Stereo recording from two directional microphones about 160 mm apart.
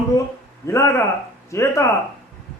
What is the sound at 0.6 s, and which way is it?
A man's voice, 20° left (ahead or behind).